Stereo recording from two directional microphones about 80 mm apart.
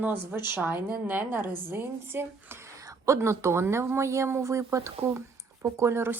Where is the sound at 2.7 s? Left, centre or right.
Right.